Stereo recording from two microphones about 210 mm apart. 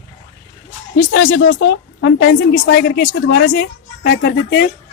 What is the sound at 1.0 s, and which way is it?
A woman's voice, 65° left (ahead or behind).